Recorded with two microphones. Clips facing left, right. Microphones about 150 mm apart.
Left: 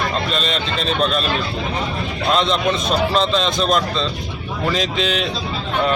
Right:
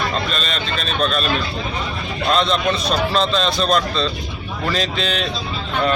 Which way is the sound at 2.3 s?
20° left (ahead or behind).